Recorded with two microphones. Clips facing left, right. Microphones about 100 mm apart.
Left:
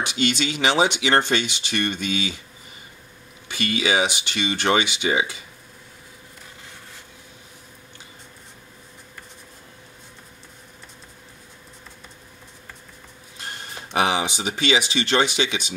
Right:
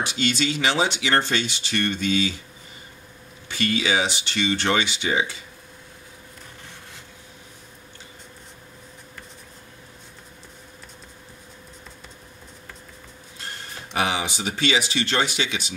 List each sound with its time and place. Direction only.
0.4 s speech: 20° left (ahead or behind)
3.4 s speech: 15° left (ahead or behind)
13.9 s speech: 20° left (ahead or behind)